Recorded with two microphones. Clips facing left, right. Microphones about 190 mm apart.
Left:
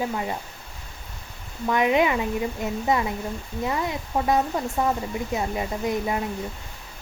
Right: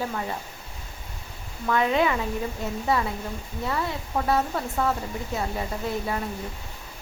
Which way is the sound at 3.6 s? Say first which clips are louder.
Left 2 dB; 15° left (ahead or behind).